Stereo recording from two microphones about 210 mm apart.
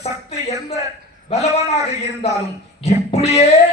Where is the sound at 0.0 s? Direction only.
30° left (ahead or behind).